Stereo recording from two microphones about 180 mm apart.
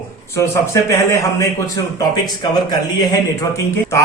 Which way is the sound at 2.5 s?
25° left (ahead or behind).